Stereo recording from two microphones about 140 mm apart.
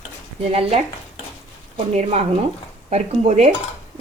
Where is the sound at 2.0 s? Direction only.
50° right (ahead or behind).